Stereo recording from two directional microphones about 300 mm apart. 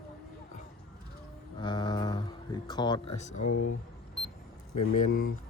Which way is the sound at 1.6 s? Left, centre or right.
Centre.